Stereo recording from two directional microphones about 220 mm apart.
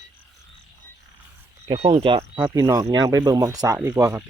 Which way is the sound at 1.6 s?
25° right (ahead or behind).